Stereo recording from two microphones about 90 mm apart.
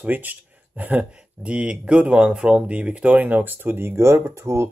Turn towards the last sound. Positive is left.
turn(degrees=-35)  # may be behind; listen again after turning